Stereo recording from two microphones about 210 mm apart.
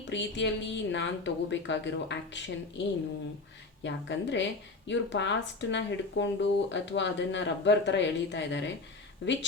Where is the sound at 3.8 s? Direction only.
60° left (ahead or behind).